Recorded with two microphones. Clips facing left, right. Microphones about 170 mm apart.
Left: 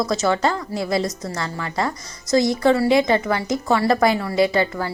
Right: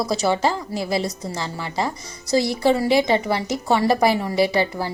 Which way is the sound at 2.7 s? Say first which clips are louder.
Even; 20° right (ahead or behind).